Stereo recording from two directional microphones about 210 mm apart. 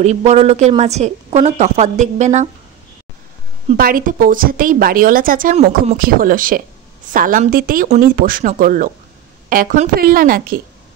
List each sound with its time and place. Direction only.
0.0 s a woman's voice: 35° right (ahead or behind)
3.7 s a woman's voice: 45° right (ahead or behind)